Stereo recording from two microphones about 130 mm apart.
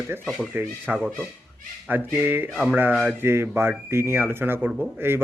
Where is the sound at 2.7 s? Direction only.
15° right (ahead or behind).